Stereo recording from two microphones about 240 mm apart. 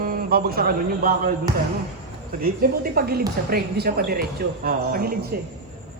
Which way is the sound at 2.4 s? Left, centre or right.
Right.